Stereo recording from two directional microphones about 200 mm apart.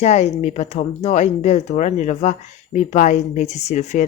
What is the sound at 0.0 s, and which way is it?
Speech, 35° left (ahead or behind).